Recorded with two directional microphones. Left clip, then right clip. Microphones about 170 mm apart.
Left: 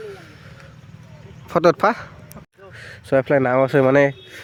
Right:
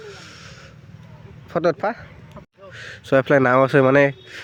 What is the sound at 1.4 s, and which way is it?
Speech, 15° left (ahead or behind).